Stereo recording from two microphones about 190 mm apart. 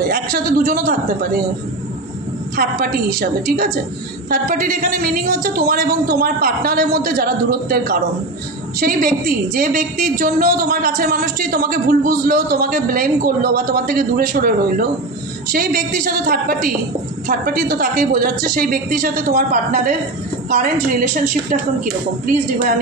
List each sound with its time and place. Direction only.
0.1 s a woman's voice: 50° right (ahead or behind)
2.5 s a woman's voice: 50° right (ahead or behind)